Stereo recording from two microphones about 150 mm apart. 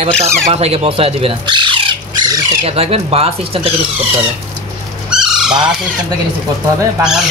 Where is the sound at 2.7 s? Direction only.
40° right (ahead or behind).